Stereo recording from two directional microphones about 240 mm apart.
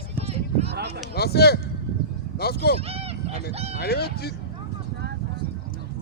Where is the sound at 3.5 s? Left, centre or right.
Right.